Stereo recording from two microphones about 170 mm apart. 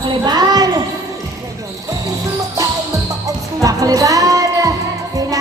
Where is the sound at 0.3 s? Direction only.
25° right (ahead or behind).